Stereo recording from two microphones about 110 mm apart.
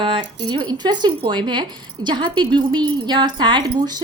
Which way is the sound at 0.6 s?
40° right (ahead or behind).